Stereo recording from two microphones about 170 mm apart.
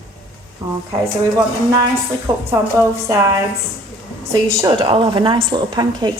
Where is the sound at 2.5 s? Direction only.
20° right (ahead or behind).